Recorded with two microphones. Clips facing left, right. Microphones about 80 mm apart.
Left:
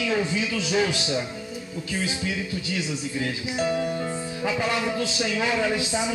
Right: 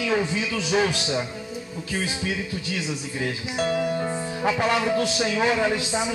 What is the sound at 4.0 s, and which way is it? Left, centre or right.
Music, right.